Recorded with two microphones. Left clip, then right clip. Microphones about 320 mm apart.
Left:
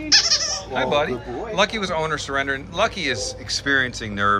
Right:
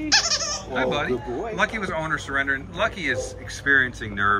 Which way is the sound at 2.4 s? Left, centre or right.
Left.